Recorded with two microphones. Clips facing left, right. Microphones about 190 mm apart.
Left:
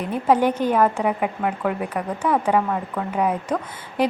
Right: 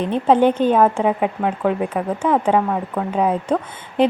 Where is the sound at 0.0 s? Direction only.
25° right (ahead or behind).